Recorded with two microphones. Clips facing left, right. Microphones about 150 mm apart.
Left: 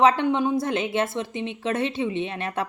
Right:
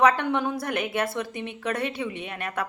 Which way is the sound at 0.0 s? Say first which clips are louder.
Left 2 dB; 20° left (ahead or behind).